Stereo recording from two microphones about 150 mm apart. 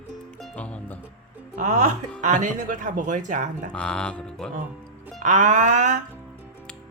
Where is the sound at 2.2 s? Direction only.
55° right (ahead or behind).